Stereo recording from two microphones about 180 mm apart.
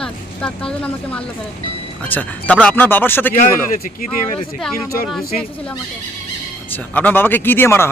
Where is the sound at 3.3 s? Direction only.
45° left (ahead or behind).